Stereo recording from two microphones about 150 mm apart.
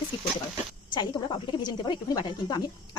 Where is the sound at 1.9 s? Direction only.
30° left (ahead or behind).